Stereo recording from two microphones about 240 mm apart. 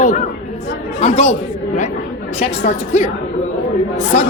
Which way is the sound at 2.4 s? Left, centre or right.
Left.